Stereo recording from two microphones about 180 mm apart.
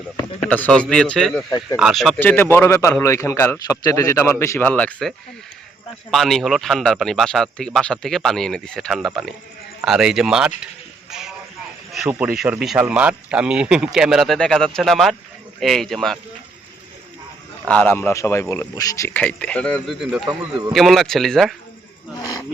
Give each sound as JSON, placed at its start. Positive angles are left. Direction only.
{"t": 0.4, "sound": "a man's voice", "side_deg": 10}
{"t": 11.1, "sound": "a sound", "side_deg": -5}
{"t": 11.9, "sound": "speech", "side_deg": -5}
{"t": 17.7, "sound": "a man's voice", "side_deg": 10}
{"t": 22.2, "sound": "speech", "side_deg": 20}